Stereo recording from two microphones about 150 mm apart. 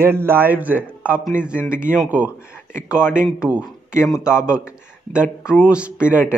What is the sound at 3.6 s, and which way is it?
Speech, 20° left (ahead or behind).